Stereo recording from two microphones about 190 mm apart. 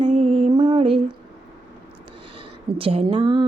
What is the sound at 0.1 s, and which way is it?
Mantra, 30° right (ahead or behind).